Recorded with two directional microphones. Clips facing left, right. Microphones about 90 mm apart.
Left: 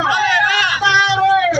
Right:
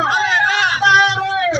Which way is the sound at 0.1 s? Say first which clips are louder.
Left 1 dB; 25° right (ahead or behind).